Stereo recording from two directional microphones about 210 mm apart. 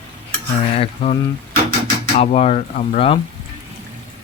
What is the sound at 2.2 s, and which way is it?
Speech, 30° left (ahead or behind).